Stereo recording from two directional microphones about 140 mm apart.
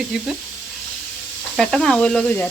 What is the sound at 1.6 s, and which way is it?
Speech, 5° left (ahead or behind).